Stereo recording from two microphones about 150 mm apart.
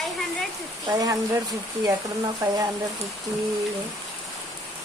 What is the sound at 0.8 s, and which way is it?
Speech, 25° right (ahead or behind).